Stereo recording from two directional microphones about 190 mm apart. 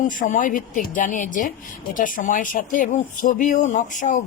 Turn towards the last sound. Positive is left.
turn(degrees=40)  # may be behind; listen again after turning